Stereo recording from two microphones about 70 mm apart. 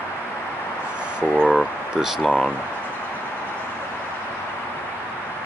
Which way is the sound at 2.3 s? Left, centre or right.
Centre.